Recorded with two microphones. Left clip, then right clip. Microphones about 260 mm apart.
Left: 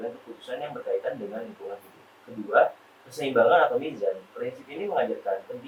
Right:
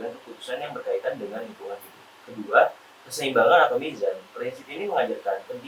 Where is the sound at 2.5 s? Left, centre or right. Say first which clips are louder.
Right 2 dB; centre.